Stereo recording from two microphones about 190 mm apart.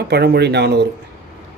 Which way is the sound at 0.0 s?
60° right (ahead or behind).